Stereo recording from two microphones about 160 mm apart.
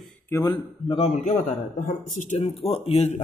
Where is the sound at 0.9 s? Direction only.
40° left (ahead or behind).